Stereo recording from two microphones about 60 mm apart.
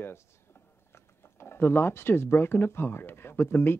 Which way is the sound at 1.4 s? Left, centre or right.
Left.